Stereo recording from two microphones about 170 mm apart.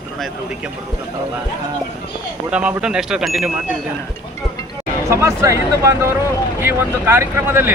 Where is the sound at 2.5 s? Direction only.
5° right (ahead or behind).